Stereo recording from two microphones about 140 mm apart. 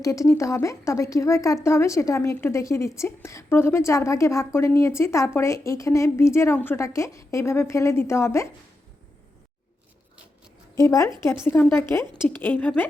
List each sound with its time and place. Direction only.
0.0 s speech: 25° left (ahead or behind)
10.8 s a woman's voice: 20° left (ahead or behind)